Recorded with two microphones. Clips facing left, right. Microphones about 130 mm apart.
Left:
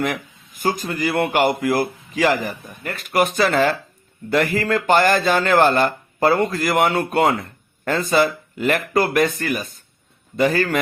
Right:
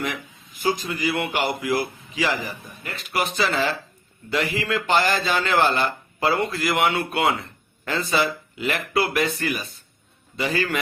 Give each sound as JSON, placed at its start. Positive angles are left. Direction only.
{"t": 0.0, "sound": "speech", "side_deg": 50}